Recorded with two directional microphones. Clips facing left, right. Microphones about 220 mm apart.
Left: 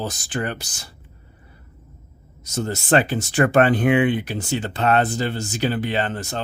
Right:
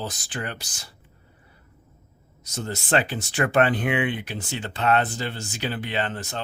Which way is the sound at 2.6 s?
45° left (ahead or behind).